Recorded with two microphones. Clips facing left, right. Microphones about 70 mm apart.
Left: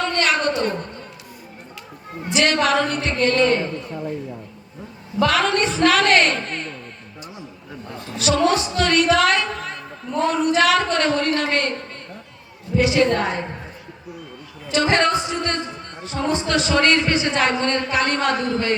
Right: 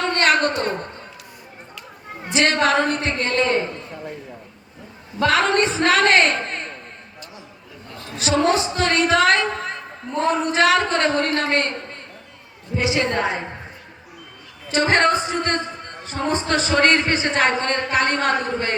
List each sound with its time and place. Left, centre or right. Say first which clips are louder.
0.1 s a sound: right 2 dB; right
2.3 s speech: even; right
5.2 s speech: right 1 dB; right
8.2 s speech: even; right
12.7 s speech: left 4 dB; centre
14.7 s speech: right 1 dB; right